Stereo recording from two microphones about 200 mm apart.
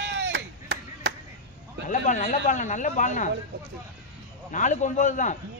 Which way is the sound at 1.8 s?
40° left (ahead or behind).